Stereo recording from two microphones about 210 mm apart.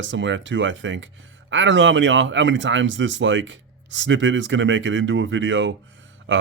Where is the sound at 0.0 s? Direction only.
60° right (ahead or behind).